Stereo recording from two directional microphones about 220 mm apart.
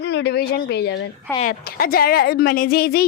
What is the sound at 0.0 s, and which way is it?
A woman's voice, 50° left (ahead or behind).